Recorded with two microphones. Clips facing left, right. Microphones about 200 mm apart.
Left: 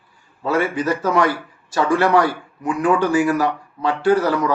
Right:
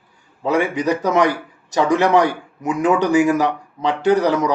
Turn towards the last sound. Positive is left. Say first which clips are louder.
# right 1 dB
turn(degrees=-20)  # may be behind; listen again after turning